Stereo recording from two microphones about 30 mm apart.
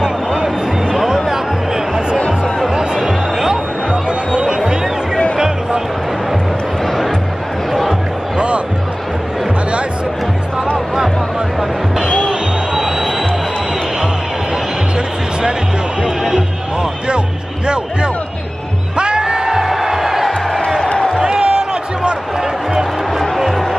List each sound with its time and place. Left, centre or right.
1.0 s music: centre
2.1 s music: left
3.1 s music: centre
3.9 s a sound: right
12.3 s music: centre
16.0 s music: right
18.9 s music: right
19.6 s music: centre
21.3 s a sound: right
22.4 s music: centre
23.3 s music: centre